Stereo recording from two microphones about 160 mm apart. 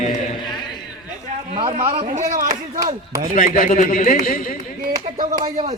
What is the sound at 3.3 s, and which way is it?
A man's voice, 55° left (ahead or behind).